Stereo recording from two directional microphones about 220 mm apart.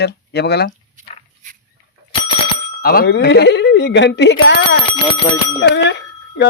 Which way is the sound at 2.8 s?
45° left (ahead or behind).